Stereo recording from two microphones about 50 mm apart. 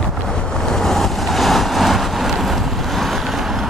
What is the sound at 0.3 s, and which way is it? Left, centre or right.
Boat, centre.